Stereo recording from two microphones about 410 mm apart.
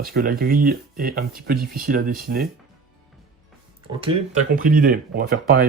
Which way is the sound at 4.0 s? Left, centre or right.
Centre.